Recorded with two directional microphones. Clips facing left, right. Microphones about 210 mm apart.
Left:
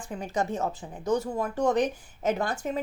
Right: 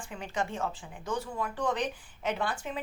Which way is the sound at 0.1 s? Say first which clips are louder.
Left 5 dB; 40° left (ahead or behind).